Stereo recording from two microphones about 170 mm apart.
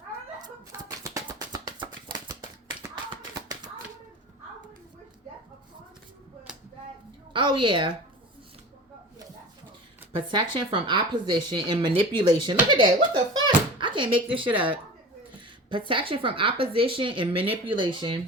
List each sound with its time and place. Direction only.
0.4 s a sound: 25° right (ahead or behind)
7.3 s speech: 30° right (ahead or behind)
10.1 s a child's voice: 30° right (ahead or behind)
15.9 s speech: 30° right (ahead or behind)